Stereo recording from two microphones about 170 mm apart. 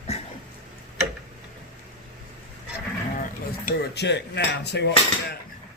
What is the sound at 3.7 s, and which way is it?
Cutlery, 75° left (ahead or behind).